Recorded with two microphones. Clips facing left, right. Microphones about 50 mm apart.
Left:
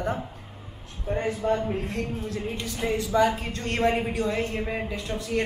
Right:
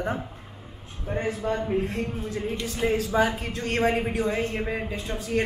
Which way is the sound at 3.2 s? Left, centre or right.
Centre.